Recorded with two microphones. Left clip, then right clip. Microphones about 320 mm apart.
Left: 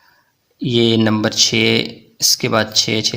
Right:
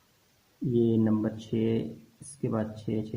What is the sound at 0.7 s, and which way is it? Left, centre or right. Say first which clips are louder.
Speech: left 12 dB; left.